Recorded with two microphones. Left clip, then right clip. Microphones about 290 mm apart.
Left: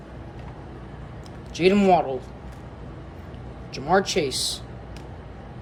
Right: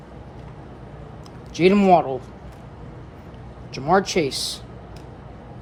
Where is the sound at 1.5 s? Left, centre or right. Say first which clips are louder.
Right 3 dB; centre.